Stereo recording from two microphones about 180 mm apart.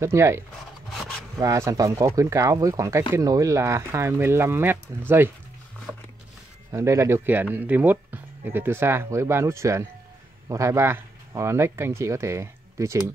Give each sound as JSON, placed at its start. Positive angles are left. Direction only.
{"t": 0.0, "sound": "speech", "side_deg": -15}
{"t": 6.7, "sound": "speech", "side_deg": -15}